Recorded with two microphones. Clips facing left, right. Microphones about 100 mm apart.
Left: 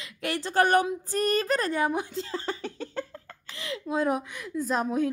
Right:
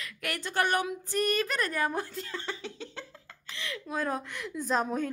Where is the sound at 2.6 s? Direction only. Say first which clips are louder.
Left 7 dB; 45° left (ahead or behind).